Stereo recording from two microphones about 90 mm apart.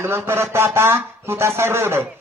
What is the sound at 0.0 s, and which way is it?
Speech, 30° right (ahead or behind).